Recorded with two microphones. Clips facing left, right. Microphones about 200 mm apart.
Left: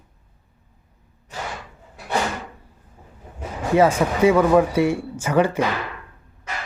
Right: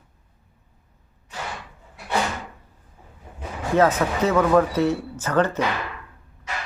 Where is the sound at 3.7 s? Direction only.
10° left (ahead or behind).